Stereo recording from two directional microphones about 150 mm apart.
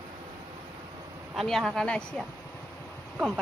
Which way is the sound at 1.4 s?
Centre (ahead or behind).